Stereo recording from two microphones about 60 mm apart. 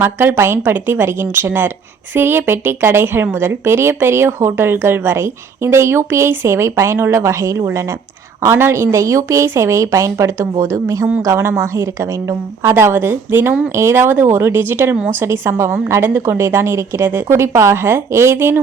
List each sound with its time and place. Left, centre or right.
0.0 s a woman's voice: right
0.3 s a woman's voice: right
8.5 s speech: right
12.7 s a woman's voice: right
16.0 s speech: right